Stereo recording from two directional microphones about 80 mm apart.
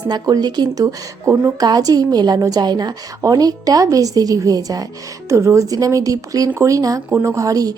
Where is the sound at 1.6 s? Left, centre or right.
Right.